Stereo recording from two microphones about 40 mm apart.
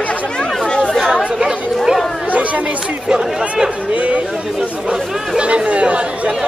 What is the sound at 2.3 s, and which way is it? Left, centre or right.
Chatter, right.